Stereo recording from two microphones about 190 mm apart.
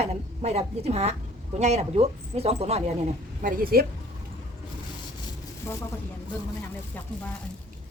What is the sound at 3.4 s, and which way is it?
Speech, 50° right (ahead or behind).